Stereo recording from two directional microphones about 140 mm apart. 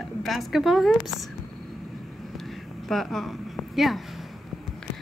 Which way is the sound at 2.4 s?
Centre (ahead or behind).